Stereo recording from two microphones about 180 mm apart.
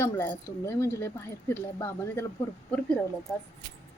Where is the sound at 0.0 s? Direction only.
15° left (ahead or behind).